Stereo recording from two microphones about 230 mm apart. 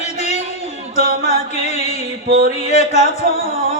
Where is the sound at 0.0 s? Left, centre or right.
Left.